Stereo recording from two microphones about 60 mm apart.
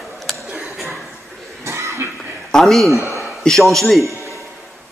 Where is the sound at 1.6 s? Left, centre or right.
Right.